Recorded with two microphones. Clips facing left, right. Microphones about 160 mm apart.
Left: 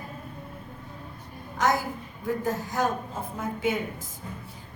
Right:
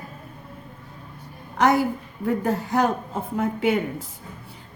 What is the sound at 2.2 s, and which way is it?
A woman's voice, 65° right (ahead or behind).